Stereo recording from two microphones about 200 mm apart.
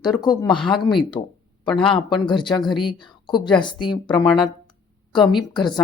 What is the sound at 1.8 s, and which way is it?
Speech, 25° left (ahead or behind).